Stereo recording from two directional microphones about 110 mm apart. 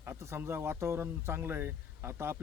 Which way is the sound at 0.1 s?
20° right (ahead or behind).